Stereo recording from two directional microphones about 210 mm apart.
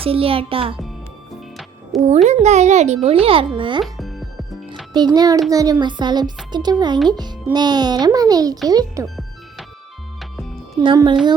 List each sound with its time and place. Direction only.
0.0 s speech: 25° right (ahead or behind)
2.2 s a child's voice: 35° right (ahead or behind)
3.8 s music: centre (ahead or behind)
4.9 s a child's voice: 20° right (ahead or behind)
9.0 s music: centre (ahead or behind)
10.8 s speech: 20° right (ahead or behind)